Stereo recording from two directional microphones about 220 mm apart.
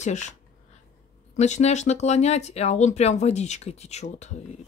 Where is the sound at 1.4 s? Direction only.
30° left (ahead or behind).